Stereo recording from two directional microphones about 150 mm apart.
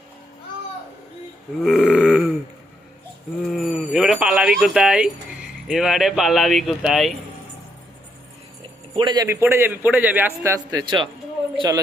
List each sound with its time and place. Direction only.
1.6 s burping: 5° left (ahead or behind)
3.4 s a sound: centre (ahead or behind)
3.7 s speech: 5° right (ahead or behind)
9.0 s a man's voice: 30° right (ahead or behind)
9.2 s a man's voice: 15° right (ahead or behind)